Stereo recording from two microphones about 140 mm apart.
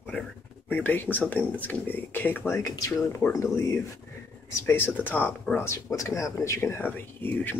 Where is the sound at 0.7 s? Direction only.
15° left (ahead or behind).